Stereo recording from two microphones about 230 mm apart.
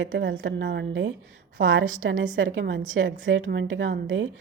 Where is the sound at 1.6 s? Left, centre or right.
Right.